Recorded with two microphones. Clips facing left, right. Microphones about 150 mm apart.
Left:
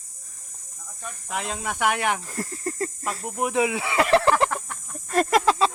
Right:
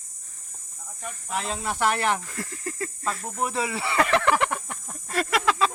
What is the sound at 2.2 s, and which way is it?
Snake, 35° left (ahead or behind).